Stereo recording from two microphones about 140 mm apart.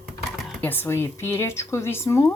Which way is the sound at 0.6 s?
15° left (ahead or behind).